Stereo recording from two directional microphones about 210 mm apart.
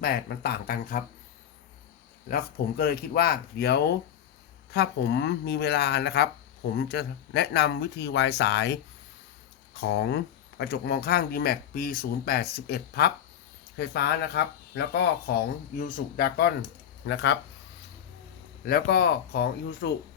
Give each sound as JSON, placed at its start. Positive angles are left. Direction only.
{"t": 0.0, "sound": "speech", "side_deg": 45}
{"t": 2.3, "sound": "speech", "side_deg": 45}
{"t": 9.8, "sound": "speech", "side_deg": 55}
{"t": 18.6, "sound": "speech", "side_deg": 50}